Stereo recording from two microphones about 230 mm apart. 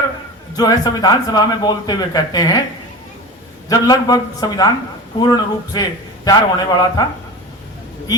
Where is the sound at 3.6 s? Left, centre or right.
Centre.